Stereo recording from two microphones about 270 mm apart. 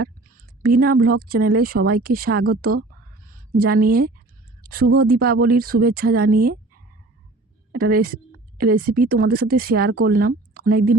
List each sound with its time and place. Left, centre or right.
0.6 s speech: right
7.7 s a woman's voice: right